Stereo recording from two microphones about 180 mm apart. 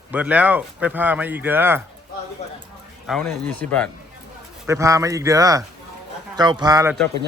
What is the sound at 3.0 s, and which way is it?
Speech, 5° left (ahead or behind).